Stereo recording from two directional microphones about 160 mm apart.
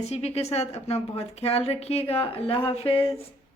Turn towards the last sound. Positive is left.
turn(degrees=35)  # may be behind; listen again after turning